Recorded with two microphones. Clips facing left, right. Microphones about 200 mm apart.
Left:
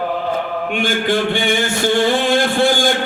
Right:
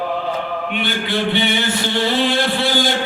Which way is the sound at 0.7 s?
45° left (ahead or behind).